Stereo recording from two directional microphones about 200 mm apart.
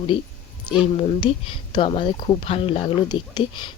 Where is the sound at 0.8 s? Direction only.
25° left (ahead or behind).